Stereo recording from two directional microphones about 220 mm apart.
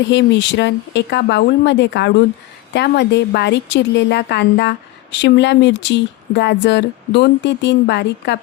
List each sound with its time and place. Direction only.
0.1 s speech: 55° left (ahead or behind)